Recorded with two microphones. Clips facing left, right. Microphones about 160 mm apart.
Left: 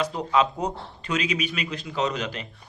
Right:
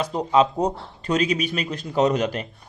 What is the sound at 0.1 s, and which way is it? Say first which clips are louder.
Speech: right 4 dB; 35° right (ahead or behind).